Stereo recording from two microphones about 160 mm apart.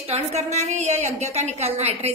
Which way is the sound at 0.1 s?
45° right (ahead or behind).